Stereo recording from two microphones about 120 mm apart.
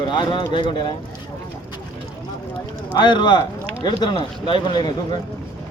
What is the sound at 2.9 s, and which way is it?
Speech, 40° left (ahead or behind).